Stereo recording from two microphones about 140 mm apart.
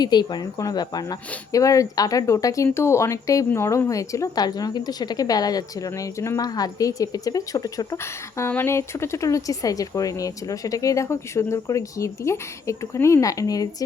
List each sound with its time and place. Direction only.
0.0 s a woman's voice: 30° left (ahead or behind)